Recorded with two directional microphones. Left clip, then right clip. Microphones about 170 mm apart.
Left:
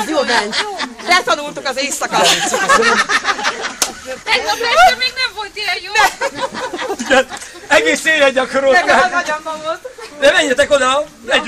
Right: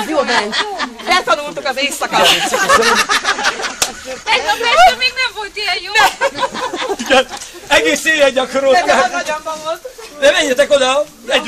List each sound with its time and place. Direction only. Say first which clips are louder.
0.0 s a sound: even; 40° left (ahead or behind)
1.0 s speech: even; 25° left (ahead or behind)
2.8 s a sound: even; 55° right (ahead or behind)
4.3 s speech: right 2 dB; 30° left (ahead or behind)
7.1 s speech: right 1 dB; 5° right (ahead or behind)
7.7 s a man's voice: even; 5° left (ahead or behind)
10.2 s a man's voice: even; centre (ahead or behind)